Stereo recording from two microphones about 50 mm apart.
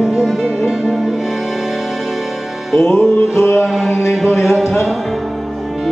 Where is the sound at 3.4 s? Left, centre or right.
Left.